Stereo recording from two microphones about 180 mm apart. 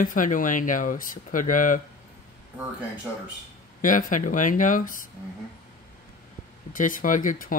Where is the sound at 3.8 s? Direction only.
45° left (ahead or behind).